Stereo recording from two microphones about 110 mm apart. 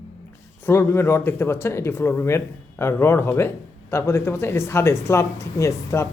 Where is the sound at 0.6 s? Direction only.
25° left (ahead or behind).